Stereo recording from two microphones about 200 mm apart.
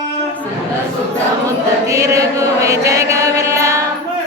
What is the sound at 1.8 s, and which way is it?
Music, 15° right (ahead or behind).